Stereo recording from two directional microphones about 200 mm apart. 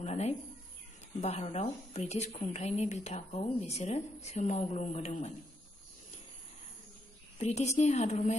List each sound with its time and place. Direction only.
0.0 s bird: 35° left (ahead or behind)
1.2 s speech: 35° left (ahead or behind)
7.3 s speech: 35° left (ahead or behind)